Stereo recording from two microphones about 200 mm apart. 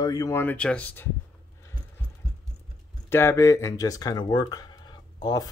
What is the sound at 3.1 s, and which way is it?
Speech, 15° left (ahead or behind).